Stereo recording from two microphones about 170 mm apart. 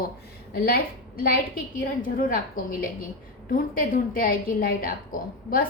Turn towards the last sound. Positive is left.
turn(degrees=55)  # may be behind; listen again after turning